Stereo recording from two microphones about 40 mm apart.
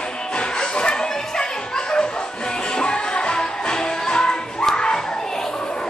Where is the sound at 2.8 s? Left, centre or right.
Left.